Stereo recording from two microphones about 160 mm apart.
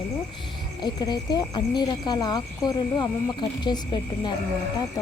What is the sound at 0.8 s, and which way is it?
Speech, 25° left (ahead or behind).